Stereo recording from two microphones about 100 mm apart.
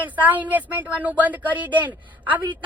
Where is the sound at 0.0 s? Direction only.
15° right (ahead or behind).